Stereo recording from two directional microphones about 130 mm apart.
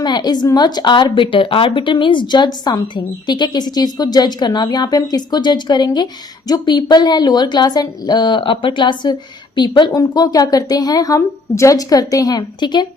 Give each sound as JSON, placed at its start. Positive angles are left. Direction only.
{"t": 0.0, "sound": "a woman's voice", "side_deg": 30}